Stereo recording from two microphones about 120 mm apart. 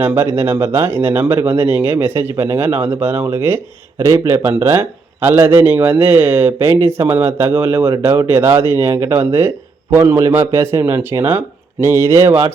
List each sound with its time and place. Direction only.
0.0 s speech: 20° right (ahead or behind)